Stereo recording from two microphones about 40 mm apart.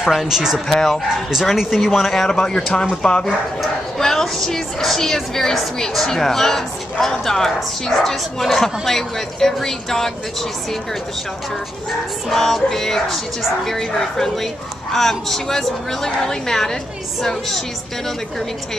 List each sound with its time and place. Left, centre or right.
0.0 s speech: centre
0.7 s a woman's voice: centre
1.4 s a woman's voice: centre
12.3 s a woman's voice: centre